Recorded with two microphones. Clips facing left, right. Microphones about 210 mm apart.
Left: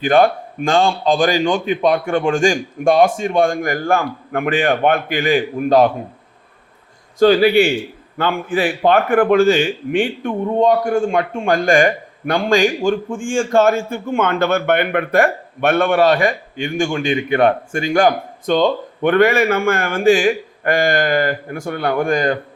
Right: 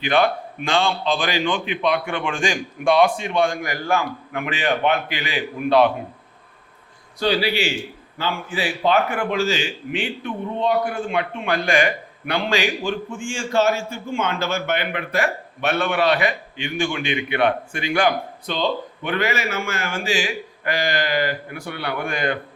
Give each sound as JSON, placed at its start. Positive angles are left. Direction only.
{"t": 0.0, "sound": "a man's voice", "side_deg": 45}
{"t": 7.2, "sound": "a man's voice", "side_deg": 50}